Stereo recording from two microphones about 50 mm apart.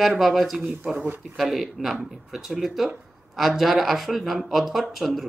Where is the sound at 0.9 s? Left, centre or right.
Right.